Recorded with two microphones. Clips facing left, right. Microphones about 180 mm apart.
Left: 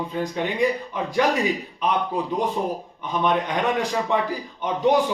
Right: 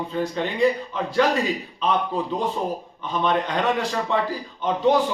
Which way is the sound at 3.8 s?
15° left (ahead or behind).